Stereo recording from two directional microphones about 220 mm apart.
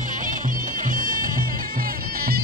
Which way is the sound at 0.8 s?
40° right (ahead or behind).